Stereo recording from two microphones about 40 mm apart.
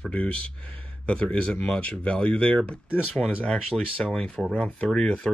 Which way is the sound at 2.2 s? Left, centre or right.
Left.